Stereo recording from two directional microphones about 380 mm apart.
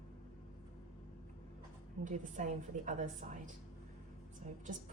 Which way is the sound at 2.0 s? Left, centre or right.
Centre.